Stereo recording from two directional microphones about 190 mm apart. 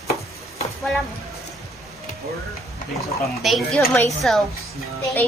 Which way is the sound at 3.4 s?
Centre (ahead or behind).